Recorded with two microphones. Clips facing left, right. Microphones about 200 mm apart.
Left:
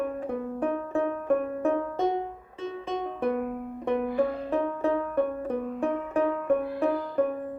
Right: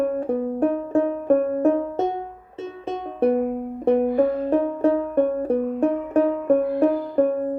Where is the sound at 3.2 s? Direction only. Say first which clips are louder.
Right 10 dB; 35° right (ahead or behind).